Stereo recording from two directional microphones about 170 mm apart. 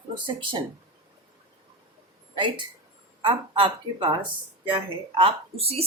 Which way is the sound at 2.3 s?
30° right (ahead or behind).